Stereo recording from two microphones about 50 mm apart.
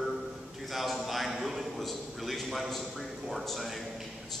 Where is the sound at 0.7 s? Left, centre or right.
Centre.